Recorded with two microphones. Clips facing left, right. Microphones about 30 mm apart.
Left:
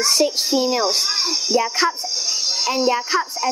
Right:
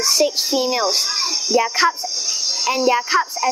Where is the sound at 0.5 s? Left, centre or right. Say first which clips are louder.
Even; centre.